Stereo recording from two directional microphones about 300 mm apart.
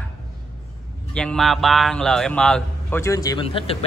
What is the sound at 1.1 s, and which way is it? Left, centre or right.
A man's voice, centre.